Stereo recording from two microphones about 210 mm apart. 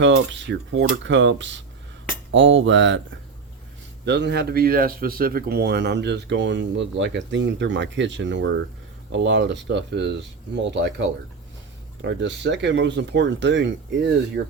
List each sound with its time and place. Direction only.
0.0 s a man's voice: 60° right (ahead or behind)
4.0 s a man's voice: 55° right (ahead or behind)
12.0 s a man's voice: 55° right (ahead or behind)